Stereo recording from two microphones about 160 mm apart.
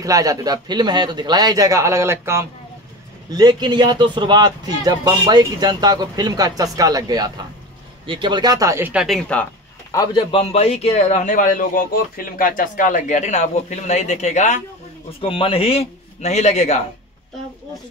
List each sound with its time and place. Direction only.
0.0 s speech: 20° right (ahead or behind)
9.0 s speech: 5° left (ahead or behind)
9.8 s a man's voice: 25° left (ahead or behind); by 14.6 s 50° left (ahead or behind)
15.0 s a man's voice: 35° left (ahead or behind)